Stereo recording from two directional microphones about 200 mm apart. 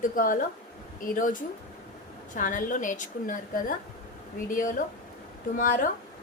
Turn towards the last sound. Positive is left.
turn(degrees=45)  # may be behind; listen again after turning